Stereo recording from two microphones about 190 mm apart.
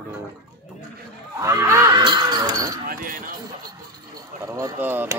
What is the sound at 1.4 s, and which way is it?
Speech, 15° right (ahead or behind).